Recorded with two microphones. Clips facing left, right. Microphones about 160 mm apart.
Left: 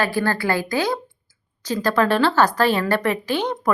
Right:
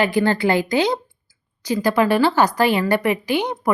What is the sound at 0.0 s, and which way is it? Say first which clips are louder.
Speech: right 4 dB; 20° right (ahead or behind).